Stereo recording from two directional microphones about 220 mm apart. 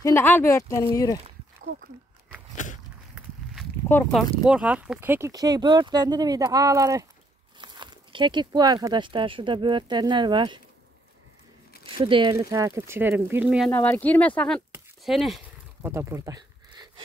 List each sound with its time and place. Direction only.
0.0 s speech: 10° left (ahead or behind)
2.5 s biting: 35° left (ahead or behind)
3.9 s speech: 5° left (ahead or behind); by 10.6 s 20° right (ahead or behind)
11.8 s speech: 20° right (ahead or behind); by 13.7 s 5° right (ahead or behind)
13.7 s speech: 10° left (ahead or behind)
14.7 s a sound: centre (ahead or behind)
15.9 s a sound: 10° right (ahead or behind)